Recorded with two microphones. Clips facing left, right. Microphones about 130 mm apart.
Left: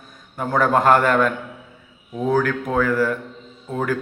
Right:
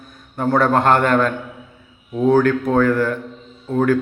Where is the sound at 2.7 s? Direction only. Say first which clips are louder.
Even; 5° left (ahead or behind).